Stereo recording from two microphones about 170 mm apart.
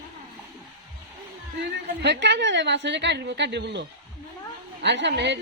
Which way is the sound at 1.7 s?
90° right.